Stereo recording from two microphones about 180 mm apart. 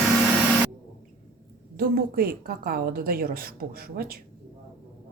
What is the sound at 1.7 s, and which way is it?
A woman's voice, 55° right (ahead or behind).